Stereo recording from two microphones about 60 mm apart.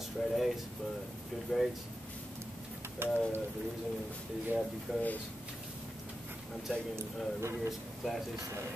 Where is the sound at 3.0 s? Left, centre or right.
Right.